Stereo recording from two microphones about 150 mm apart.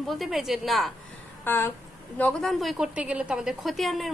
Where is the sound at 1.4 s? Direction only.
15° left (ahead or behind).